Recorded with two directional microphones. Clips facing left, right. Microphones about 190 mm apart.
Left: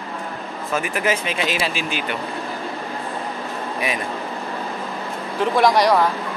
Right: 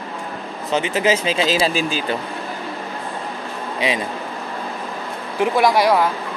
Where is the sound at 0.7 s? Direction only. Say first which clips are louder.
Right 4 dB; 25° right (ahead or behind).